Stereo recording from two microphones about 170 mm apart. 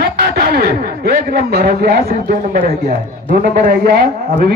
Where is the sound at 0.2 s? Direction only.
70° right (ahead or behind).